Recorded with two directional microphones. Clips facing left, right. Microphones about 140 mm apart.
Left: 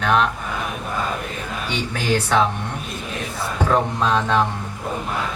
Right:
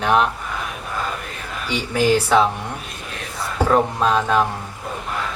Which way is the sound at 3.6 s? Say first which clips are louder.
Right 2 dB; 10° right (ahead or behind).